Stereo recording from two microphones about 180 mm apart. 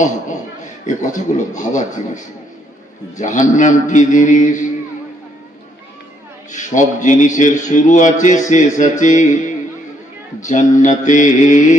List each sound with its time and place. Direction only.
0.0 s a man's voice: 45° left (ahead or behind)
6.5 s a man's voice: 45° left (ahead or behind)
10.4 s a man's voice: 45° left (ahead or behind)